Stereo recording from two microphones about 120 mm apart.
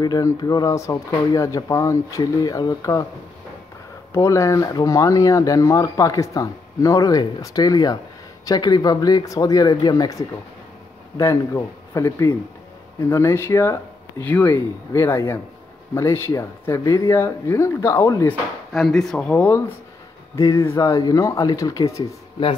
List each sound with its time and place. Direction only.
0.0 s speech: 35° left (ahead or behind)
4.1 s speech: 25° left (ahead or behind)
11.1 s speech: 25° left (ahead or behind)
18.7 s speech: centre (ahead or behind)
20.3 s speech: 25° left (ahead or behind)